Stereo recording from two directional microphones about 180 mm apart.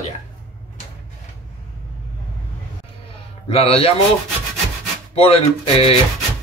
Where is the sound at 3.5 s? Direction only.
35° left (ahead or behind).